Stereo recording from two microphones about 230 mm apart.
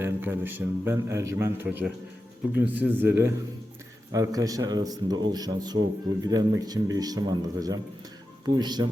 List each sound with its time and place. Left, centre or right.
0.0 s a man's voice: centre